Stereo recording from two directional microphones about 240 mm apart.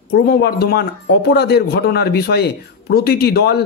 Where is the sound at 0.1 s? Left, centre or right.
Left.